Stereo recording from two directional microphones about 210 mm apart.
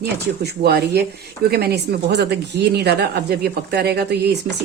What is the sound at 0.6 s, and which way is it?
Speech, 50° right (ahead or behind).